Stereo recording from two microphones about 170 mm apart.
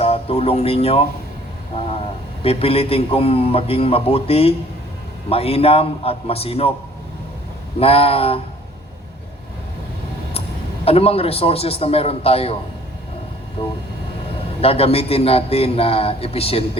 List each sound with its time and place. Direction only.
0.0 s speech: 35° left (ahead or behind)
2.4 s a man's voice: 35° left (ahead or behind)
7.8 s a man's voice: 35° left (ahead or behind)
10.8 s a man's voice: 35° left (ahead or behind)
14.6 s a man's voice: 35° left (ahead or behind)